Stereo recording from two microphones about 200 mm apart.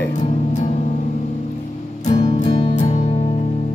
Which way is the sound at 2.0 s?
35° left (ahead or behind).